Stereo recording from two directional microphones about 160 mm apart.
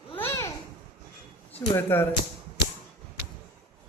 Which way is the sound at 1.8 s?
15° left (ahead or behind).